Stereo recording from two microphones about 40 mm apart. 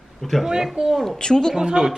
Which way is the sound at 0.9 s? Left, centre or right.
Centre.